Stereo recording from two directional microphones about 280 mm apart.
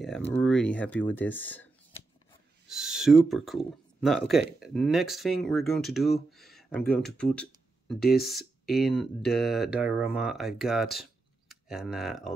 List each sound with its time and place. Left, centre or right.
0.0 s speech: centre
2.7 s speech: centre
8.0 s speech: left
8.6 s speech: centre